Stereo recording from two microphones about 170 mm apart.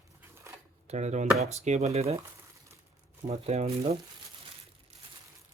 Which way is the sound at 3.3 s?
40° right (ahead or behind).